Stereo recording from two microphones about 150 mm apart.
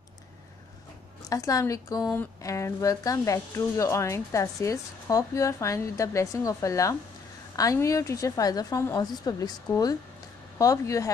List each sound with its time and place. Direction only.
1.3 s speech: 25° left (ahead or behind)